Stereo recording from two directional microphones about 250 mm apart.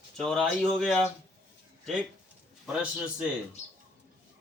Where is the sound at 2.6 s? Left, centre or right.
Centre.